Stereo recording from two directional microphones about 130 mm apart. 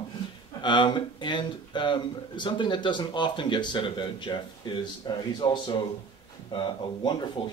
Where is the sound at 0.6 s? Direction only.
35° left (ahead or behind).